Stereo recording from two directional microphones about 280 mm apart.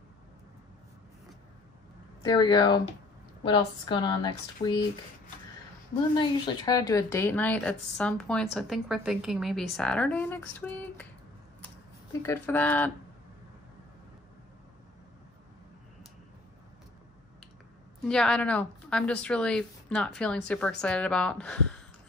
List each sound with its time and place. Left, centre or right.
2.2 s speech: centre
6.1 s speech: centre
11.6 s computer keyboard: centre
18.0 s speech: centre